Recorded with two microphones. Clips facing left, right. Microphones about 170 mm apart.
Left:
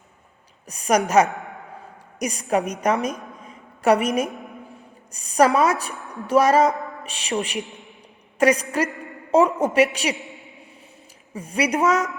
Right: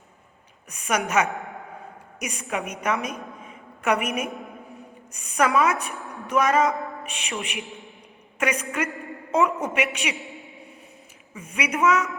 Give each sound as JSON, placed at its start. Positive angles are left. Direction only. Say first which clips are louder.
{"t": 0.7, "sound": "a woman's voice", "louder": "left 6 dB", "side_deg": 35}
{"t": 10.2, "sound": "a woman's voice", "louder": "even", "side_deg": 0}
{"t": 11.3, "sound": "a woman's voice", "louder": "left 4 dB", "side_deg": 35}